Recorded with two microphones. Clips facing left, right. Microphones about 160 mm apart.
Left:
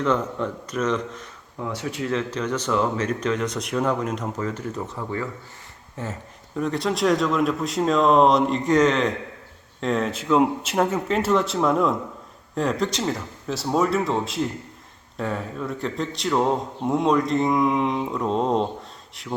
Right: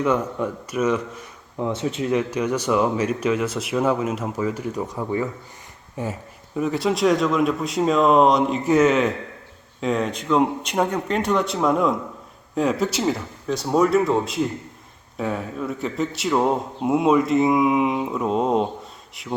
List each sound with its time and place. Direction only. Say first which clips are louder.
0.0 s speech: right 2 dB; 10° right (ahead or behind)
1.5 s speech: right 5 dB; 25° right (ahead or behind)
6.6 s mantra: right 2 dB; 5° right (ahead or behind)